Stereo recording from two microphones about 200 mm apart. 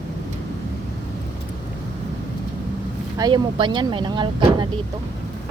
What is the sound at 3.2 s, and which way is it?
Speech, 25° right (ahead or behind).